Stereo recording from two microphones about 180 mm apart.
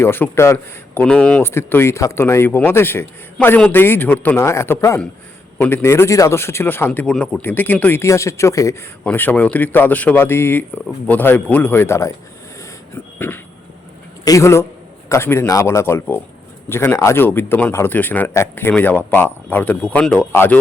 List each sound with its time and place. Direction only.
0.0 s speech: 15° left (ahead or behind)
12.9 s a sound: 10° left (ahead or behind)
14.3 s speech: 15° left (ahead or behind)